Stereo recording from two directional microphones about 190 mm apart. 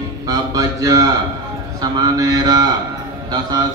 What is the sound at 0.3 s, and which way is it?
Speech, 20° right (ahead or behind).